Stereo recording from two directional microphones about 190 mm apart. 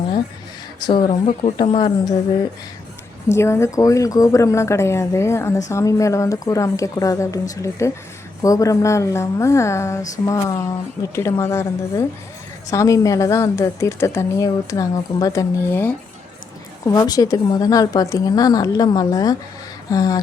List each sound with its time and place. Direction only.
0.8 s a woman's voice: 25° left (ahead or behind)
3.2 s a woman's voice: 15° left (ahead or behind)